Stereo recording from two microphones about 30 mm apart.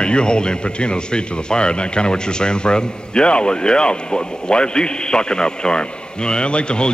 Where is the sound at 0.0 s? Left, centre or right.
Left.